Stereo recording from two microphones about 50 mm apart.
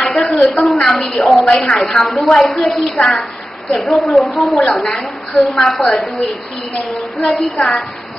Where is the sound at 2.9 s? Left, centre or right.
Left.